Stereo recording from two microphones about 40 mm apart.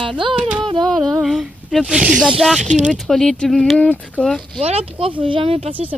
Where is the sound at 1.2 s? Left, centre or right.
Centre.